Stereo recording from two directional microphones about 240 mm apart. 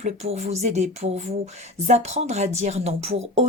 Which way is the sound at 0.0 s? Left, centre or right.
Right.